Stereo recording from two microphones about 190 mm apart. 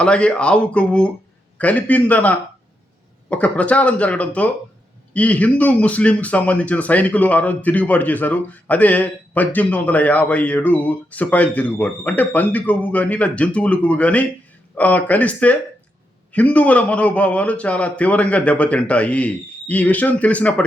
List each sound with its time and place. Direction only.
0.0 s speech: 5° left (ahead or behind)